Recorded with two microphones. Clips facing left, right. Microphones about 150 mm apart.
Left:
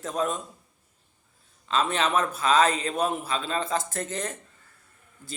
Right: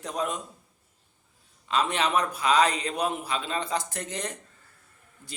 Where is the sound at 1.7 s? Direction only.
15° right (ahead or behind).